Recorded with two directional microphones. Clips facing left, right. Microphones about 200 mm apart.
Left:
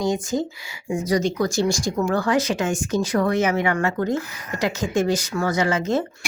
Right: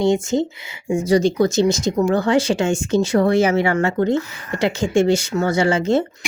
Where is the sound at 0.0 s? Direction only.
25° right (ahead or behind).